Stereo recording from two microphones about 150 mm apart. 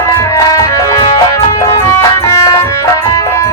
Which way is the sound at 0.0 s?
20° left (ahead or behind).